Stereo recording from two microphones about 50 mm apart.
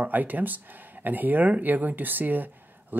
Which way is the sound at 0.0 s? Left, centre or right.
Right.